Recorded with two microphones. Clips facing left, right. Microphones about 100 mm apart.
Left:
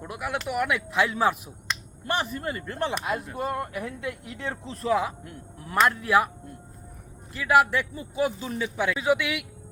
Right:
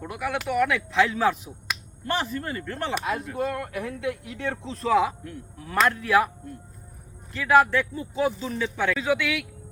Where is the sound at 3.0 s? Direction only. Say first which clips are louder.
Right 2 dB; 70° right (ahead or behind).